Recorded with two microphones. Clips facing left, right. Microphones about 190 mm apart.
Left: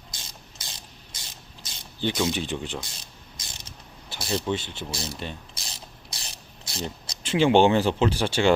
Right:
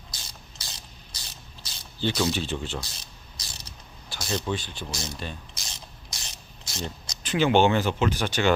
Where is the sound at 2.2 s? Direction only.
15° left (ahead or behind).